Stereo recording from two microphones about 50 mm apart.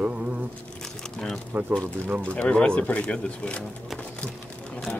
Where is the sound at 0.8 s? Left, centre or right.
Centre.